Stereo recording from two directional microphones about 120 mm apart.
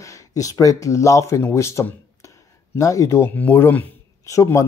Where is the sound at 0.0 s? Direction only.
25° left (ahead or behind).